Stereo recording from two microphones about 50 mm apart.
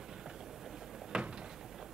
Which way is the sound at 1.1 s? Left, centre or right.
Centre.